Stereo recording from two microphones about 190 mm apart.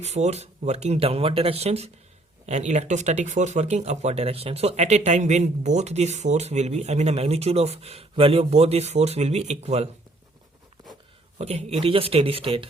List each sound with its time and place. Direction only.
0.0 s speech: 35° right (ahead or behind)
11.3 s speech: 35° right (ahead or behind)